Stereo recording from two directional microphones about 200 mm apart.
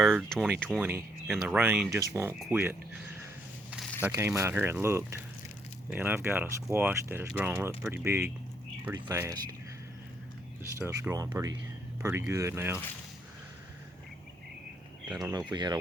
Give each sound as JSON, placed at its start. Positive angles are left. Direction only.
{"t": 0.0, "sound": "speech", "side_deg": 0}
{"t": 1.3, "sound": "speech", "side_deg": 0}
{"t": 1.5, "sound": "speech", "side_deg": -10}
{"t": 10.6, "sound": "speech", "side_deg": -10}
{"t": 15.2, "sound": "speech", "side_deg": -20}